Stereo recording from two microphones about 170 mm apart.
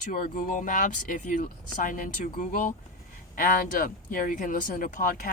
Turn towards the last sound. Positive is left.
turn(degrees=55)  # may be behind; listen again after turning